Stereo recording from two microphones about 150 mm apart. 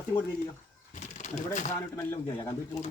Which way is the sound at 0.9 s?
55° left (ahead or behind).